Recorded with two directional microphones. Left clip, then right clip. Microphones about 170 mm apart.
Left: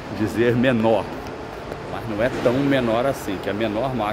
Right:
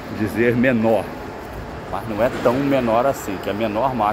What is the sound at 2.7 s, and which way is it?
Speech, 15° left (ahead or behind).